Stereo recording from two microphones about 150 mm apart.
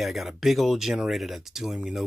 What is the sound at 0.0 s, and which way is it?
Speech, centre (ahead or behind).